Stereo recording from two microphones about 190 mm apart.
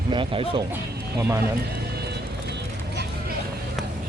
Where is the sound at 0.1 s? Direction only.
25° right (ahead or behind).